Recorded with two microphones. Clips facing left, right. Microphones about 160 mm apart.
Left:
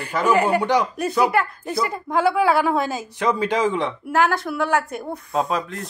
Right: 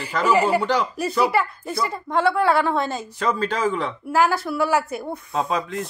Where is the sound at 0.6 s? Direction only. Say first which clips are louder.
Left 2 dB; 15° left (ahead or behind).